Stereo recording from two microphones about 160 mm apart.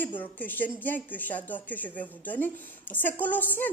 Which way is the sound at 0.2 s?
10° left (ahead or behind).